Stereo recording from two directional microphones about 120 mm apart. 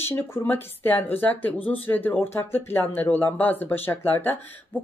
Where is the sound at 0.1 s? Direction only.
15° left (ahead or behind).